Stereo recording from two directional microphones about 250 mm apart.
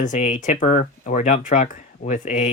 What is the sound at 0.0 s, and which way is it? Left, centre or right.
Speech, left.